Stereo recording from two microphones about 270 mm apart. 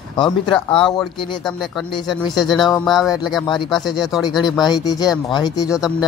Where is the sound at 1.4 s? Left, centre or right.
Centre.